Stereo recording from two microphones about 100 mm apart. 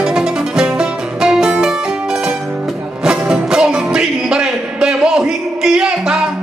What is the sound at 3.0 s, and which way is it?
Music, 5° right (ahead or behind).